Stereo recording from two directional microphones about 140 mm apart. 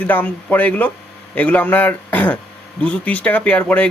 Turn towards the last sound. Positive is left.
turn(degrees=10)  # may be behind; listen again after turning